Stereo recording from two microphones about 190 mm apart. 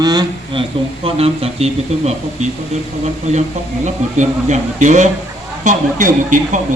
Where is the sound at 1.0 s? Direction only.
30° right (ahead or behind).